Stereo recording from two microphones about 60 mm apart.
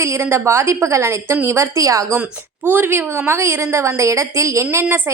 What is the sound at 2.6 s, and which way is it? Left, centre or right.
Speech, right.